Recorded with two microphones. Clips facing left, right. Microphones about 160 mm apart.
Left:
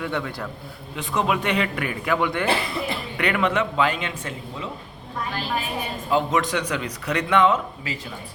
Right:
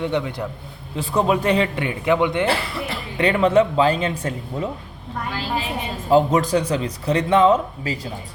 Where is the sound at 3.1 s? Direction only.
30° right (ahead or behind).